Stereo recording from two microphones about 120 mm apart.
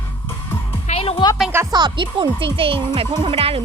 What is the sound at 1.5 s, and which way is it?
Speech, 20° right (ahead or behind).